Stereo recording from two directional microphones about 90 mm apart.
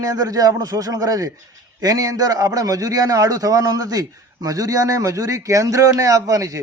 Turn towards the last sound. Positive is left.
turn(degrees=-40)  # may be behind; listen again after turning